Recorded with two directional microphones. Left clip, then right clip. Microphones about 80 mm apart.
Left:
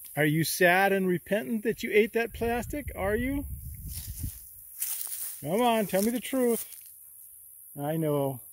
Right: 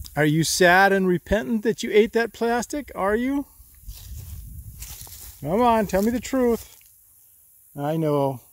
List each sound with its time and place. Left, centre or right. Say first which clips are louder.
0.0 s speech: right 5 dB; right
3.2 s speech: right 7 dB; right
4.7 s snake: left 2 dB; centre
6.1 s speech: right 5 dB; centre
7.7 s speech: right 6 dB; centre